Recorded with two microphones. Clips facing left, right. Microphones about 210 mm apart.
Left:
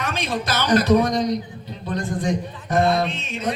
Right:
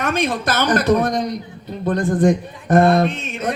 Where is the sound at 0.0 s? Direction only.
50° right (ahead or behind).